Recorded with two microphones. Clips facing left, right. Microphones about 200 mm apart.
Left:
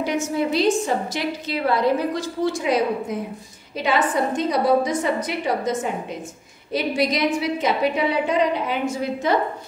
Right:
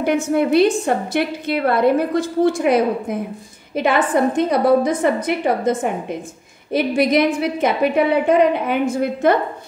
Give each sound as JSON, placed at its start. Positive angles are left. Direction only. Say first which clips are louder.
{"t": 0.0, "sound": "a woman's voice", "louder": "right 5 dB", "side_deg": -55}